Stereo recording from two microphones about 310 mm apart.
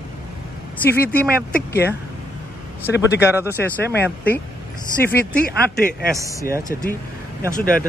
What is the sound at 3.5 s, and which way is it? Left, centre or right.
Speech, centre.